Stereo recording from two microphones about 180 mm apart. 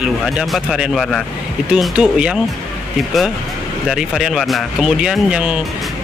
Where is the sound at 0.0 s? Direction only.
Centre (ahead or behind).